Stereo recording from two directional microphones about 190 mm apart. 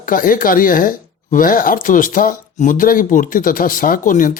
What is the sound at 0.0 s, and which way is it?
Speech, 45° left (ahead or behind).